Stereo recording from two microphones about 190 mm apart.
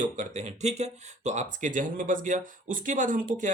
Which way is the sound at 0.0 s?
40° right (ahead or behind).